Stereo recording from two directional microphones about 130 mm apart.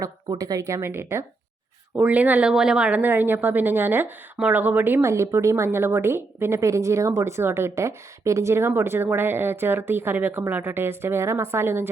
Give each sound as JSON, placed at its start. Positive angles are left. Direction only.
{"t": 0.0, "sound": "a woman's voice", "side_deg": -30}